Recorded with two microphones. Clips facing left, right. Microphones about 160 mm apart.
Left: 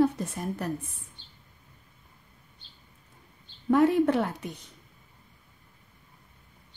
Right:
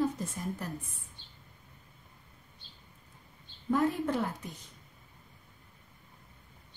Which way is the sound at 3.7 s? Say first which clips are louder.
Left 7 dB; 70° left (ahead or behind).